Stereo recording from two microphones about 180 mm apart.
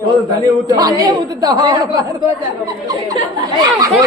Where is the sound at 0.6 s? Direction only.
20° right (ahead or behind).